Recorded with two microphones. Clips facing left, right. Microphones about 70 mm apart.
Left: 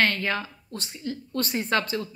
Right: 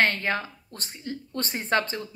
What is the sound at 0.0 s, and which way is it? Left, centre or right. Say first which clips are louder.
Speech: even; right.